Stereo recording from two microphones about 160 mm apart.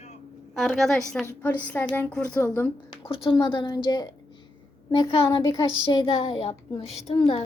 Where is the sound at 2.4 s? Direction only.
20° left (ahead or behind).